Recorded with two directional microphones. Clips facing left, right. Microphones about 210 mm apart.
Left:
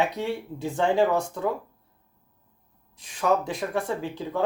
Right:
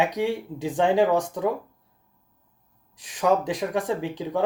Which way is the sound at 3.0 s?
15° right (ahead or behind).